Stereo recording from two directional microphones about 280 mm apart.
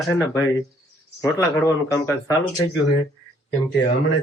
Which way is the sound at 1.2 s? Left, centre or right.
Centre.